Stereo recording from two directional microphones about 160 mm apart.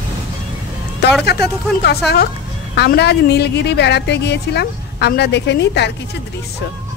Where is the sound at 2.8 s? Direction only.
90° left.